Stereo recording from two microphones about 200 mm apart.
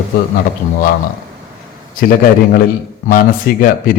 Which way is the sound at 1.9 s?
45° left (ahead or behind).